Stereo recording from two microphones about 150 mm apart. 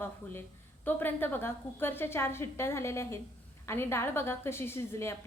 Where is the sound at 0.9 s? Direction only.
15° left (ahead or behind).